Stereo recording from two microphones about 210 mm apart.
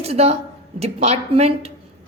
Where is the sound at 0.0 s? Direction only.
30° right (ahead or behind).